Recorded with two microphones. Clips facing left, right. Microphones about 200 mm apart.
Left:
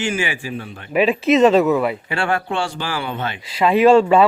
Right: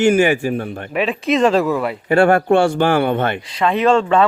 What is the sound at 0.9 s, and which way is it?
Speech, 5° left (ahead or behind).